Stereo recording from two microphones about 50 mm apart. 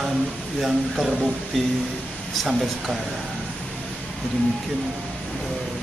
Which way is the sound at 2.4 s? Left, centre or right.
Centre.